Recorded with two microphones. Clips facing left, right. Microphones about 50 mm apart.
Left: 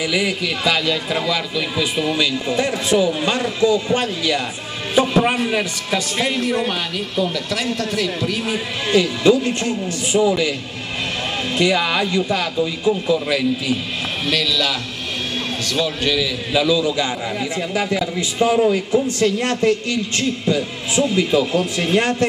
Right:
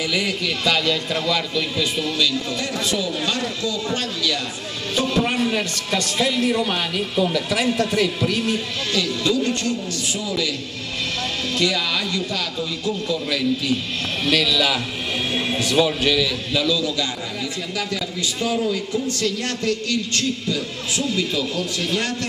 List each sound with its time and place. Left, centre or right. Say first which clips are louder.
0.0 s a man's voice: left 3 dB; centre
6.7 s a man's voice: even; centre
8.9 s a man's voice: left 7 dB; left
11.5 s a man's voice: left 5 dB; left
14.2 s a man's voice: right 1 dB; centre
16.0 s a man's voice: even; centre
16.5 s a man's voice: left 5 dB; centre